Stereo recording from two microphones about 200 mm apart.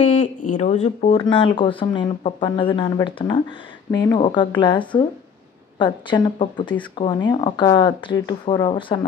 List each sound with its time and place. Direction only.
0.2 s speech: 40° left (ahead or behind)